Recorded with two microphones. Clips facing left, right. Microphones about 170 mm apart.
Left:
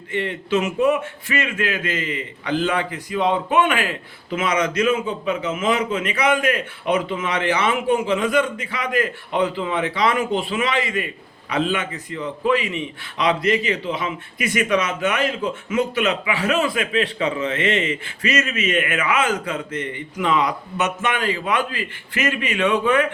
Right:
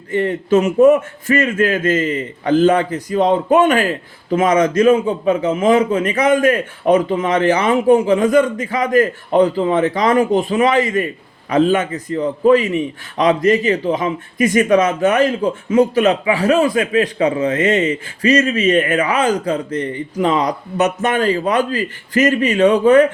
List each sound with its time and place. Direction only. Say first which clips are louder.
0.1 s a man's voice: right 7 dB; 40° right (ahead or behind)